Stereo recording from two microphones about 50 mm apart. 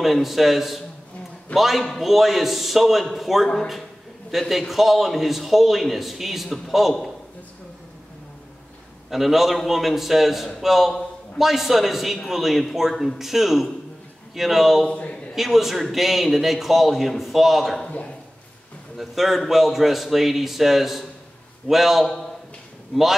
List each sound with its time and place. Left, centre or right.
0.0 s a man's voice: centre
9.1 s a man's voice: centre
14.9 s a man's voice: left
15.3 s a man's voice: centre
18.9 s a man's voice: centre